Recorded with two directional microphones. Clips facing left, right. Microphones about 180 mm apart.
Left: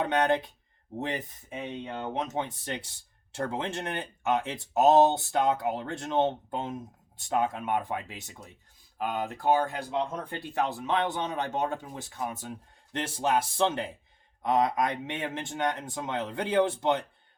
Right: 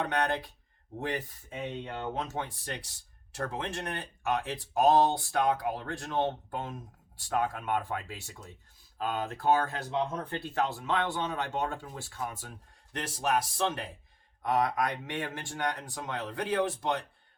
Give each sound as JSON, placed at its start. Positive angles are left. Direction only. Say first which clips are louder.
{"t": 0.0, "sound": "speech", "louder": "left 5 dB", "side_deg": 25}